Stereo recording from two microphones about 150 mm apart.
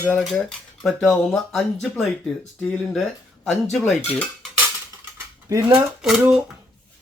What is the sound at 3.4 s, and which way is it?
Speech, centre (ahead or behind).